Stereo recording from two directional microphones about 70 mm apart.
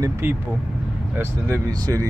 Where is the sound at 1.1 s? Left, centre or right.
Right.